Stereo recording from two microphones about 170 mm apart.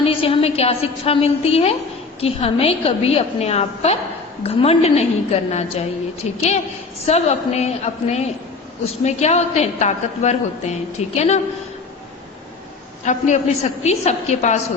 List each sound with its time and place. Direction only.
0.0 s a woman's voice: 35° left (ahead or behind)
13.1 s a woman's voice: 45° left (ahead or behind)